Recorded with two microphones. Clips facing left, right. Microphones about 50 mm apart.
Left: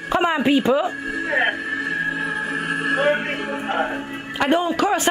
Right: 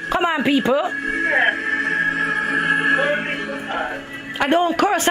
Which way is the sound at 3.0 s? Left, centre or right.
Centre.